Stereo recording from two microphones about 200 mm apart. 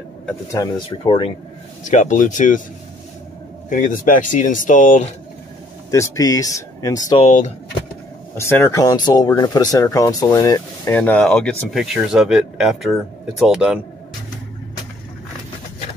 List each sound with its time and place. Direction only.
0.5 s speech: 20° left (ahead or behind)
1.9 s speech: 40° left (ahead or behind)
3.6 s speech: 40° left (ahead or behind)
5.9 s speech: 15° left (ahead or behind)
7.2 s speech: 35° left (ahead or behind)
8.4 s speech: 15° left (ahead or behind)
11.0 s speech: 5° left (ahead or behind)